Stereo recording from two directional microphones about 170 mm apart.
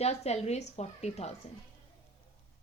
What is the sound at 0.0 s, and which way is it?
A woman's voice, 40° left (ahead or behind).